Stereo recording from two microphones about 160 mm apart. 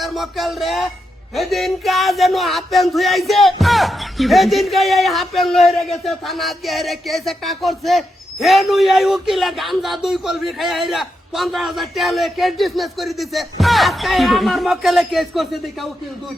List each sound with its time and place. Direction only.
0.0 s speech: centre (ahead or behind)